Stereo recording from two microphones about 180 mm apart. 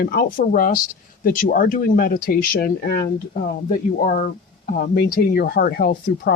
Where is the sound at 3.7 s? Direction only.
50° left (ahead or behind).